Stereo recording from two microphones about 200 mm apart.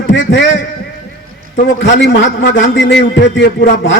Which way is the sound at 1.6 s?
55° left (ahead or behind).